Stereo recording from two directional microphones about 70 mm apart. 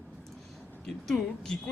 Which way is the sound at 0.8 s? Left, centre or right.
Centre.